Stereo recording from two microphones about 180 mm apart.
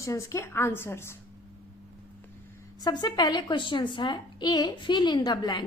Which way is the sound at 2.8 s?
25° left (ahead or behind).